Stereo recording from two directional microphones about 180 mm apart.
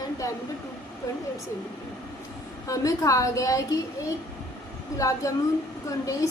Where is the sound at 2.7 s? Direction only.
20° left (ahead or behind).